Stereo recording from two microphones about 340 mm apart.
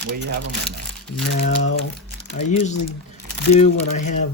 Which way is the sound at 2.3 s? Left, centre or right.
Left.